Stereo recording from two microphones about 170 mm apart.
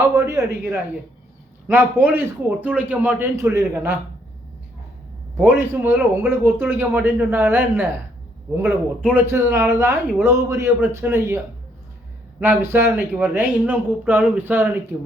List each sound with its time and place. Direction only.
0.0 s a man's voice: 15° right (ahead or behind)
5.4 s a man's voice: 10° right (ahead or behind)